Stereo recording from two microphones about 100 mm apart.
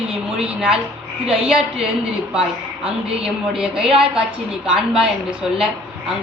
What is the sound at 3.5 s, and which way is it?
A woman's voice, 5° right (ahead or behind).